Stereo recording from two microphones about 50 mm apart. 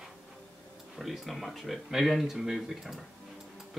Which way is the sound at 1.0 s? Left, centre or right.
Centre.